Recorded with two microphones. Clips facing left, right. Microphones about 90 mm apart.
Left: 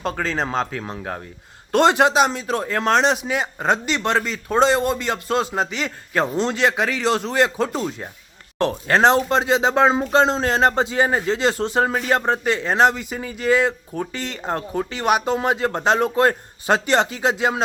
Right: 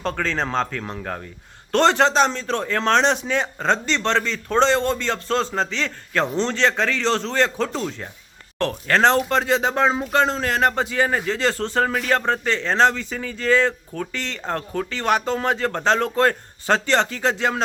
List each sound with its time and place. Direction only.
0.0 s a man's voice: 5° left (ahead or behind)